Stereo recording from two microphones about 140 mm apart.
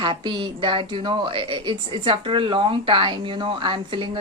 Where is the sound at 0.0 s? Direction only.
35° right (ahead or behind).